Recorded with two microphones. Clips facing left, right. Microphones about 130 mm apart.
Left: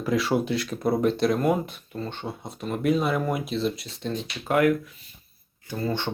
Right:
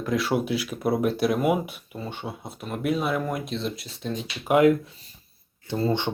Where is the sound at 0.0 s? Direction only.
Centre (ahead or behind).